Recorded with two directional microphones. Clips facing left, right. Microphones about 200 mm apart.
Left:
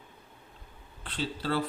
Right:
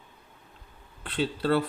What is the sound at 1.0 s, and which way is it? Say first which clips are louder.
Speech: right 6 dB; 60° right (ahead or behind).